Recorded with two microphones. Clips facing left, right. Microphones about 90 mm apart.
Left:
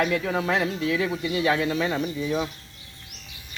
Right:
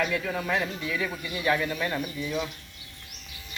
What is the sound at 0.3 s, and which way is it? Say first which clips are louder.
Speech: left 4 dB; 90° left.